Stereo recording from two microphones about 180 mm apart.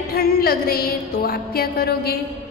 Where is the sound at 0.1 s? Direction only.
60° left (ahead or behind).